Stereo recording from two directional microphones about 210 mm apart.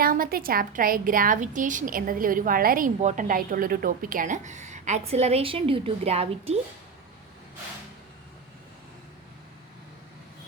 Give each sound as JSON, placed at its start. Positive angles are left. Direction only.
{"t": 0.0, "sound": "a woman's voice", "side_deg": -45}